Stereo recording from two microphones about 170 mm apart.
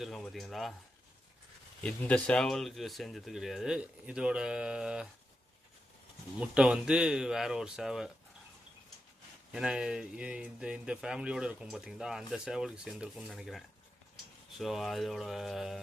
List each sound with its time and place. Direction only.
0.0 s speech: centre (ahead or behind)
1.8 s speech: 10° left (ahead or behind)
6.4 s speech: 5° right (ahead or behind)
9.5 s speech: 5° right (ahead or behind)